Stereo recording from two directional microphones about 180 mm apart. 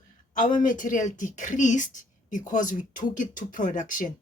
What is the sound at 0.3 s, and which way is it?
A woman's voice, 45° left (ahead or behind).